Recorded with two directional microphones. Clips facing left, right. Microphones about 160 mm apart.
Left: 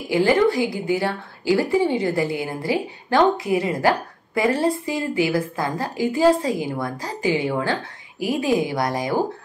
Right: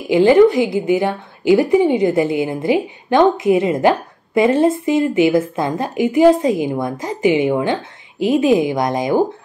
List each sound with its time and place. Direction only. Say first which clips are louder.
0.1 s a woman's voice: right 7 dB; 20° right (ahead or behind)